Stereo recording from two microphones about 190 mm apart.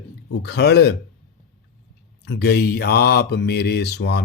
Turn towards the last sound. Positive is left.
turn(degrees=60)  # may be behind; listen again after turning